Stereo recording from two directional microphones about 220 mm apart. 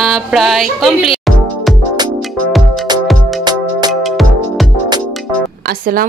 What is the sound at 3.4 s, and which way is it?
Music, 20° right (ahead or behind).